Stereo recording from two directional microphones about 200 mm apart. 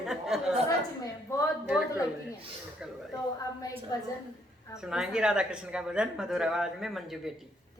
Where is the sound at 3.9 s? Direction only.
20° left (ahead or behind).